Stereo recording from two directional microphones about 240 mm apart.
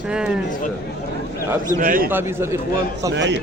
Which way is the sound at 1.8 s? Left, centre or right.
Right.